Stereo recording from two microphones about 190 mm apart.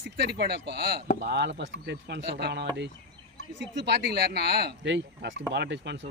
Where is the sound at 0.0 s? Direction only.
60° right (ahead or behind).